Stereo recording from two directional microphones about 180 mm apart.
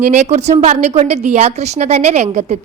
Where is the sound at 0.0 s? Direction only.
40° right (ahead or behind).